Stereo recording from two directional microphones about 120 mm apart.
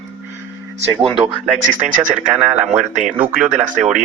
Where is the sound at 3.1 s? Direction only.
15° right (ahead or behind).